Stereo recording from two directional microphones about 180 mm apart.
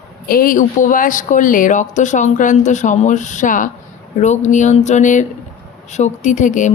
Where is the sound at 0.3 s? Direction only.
50° left (ahead or behind).